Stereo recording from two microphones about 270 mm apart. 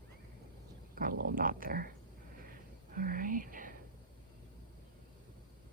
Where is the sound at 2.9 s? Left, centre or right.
Right.